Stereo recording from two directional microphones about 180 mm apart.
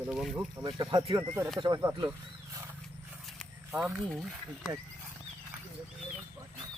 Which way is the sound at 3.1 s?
Centre (ahead or behind).